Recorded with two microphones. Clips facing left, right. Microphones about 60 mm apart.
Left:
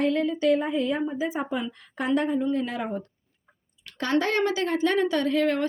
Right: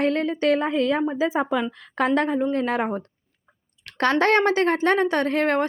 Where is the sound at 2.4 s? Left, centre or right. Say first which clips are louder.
Right 4 dB; right.